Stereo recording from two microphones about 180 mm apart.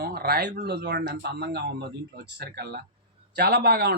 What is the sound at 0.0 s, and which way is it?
A man's voice, 60° right (ahead or behind).